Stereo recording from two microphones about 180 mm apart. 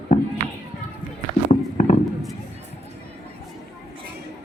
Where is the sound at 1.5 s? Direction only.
40° left (ahead or behind).